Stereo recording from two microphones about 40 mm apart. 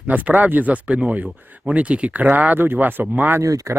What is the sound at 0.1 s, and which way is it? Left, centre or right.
Speech, right.